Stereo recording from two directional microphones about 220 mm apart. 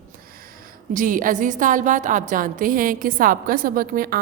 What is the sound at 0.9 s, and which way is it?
A woman's voice, 40° right (ahead or behind).